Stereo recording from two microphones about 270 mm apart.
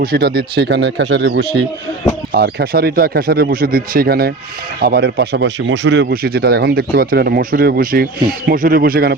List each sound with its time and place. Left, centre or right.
0.0 s speech: right